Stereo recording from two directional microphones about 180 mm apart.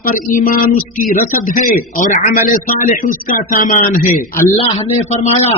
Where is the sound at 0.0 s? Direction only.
50° left (ahead or behind).